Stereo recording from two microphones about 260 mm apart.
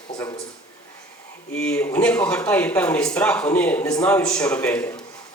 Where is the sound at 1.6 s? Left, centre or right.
Centre.